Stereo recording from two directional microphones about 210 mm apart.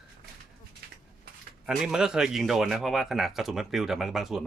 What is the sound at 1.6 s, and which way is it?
Speech, centre (ahead or behind).